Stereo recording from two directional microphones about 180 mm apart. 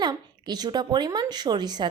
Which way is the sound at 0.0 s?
20° right (ahead or behind).